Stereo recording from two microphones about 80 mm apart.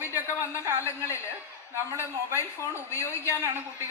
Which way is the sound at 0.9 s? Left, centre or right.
Left.